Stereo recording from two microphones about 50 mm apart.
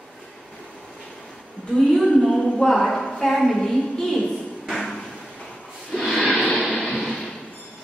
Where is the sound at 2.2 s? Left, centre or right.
Centre.